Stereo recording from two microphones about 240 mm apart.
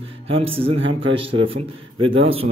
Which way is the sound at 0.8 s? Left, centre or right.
Right.